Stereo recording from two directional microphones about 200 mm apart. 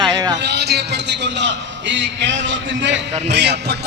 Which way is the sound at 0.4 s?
55° right (ahead or behind).